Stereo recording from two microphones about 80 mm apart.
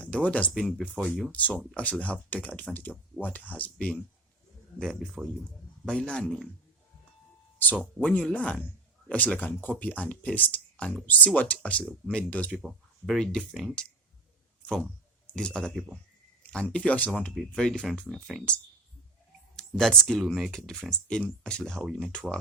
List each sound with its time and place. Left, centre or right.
0.0 s speech: centre
1.3 s a man's voice: centre
4.9 s speech: centre
5.5 s a man's voice: centre
7.6 s a man's voice: left
12.5 s speech: centre
13.1 s speech: centre
15.3 s speech: centre
17.3 s speech: centre
19.5 s speech: centre